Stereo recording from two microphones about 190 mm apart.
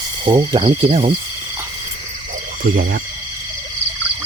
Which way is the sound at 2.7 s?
50° right (ahead or behind).